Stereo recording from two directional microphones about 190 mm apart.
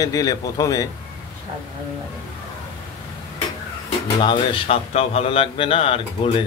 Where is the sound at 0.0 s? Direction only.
20° left (ahead or behind).